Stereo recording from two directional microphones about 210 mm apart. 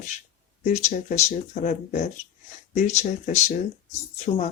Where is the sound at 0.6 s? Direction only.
35° left (ahead or behind).